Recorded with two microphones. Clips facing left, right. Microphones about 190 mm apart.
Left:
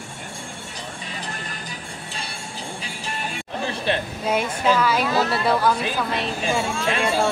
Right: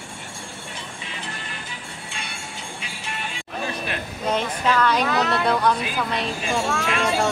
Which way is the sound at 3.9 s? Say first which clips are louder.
Left 7 dB; 30° left (ahead or behind).